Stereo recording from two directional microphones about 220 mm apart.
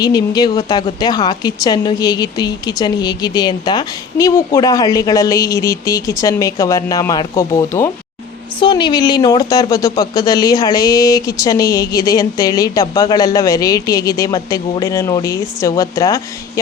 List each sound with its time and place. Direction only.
0.0 s a woman's voice: 20° left (ahead or behind)